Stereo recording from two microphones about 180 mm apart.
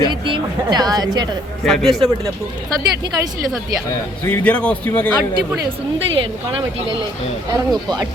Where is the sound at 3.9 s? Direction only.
10° left (ahead or behind).